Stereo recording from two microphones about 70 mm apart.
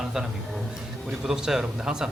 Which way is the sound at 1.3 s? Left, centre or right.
Centre.